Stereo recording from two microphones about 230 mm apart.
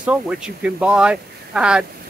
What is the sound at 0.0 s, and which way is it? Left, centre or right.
Speech, centre.